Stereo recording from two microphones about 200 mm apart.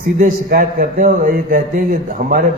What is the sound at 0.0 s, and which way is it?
A man's voice, 45° right (ahead or behind).